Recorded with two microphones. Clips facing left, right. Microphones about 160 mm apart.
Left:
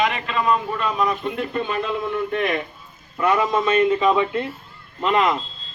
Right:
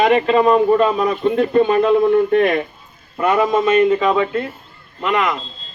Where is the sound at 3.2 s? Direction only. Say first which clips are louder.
Right 4 dB; 25° right (ahead or behind).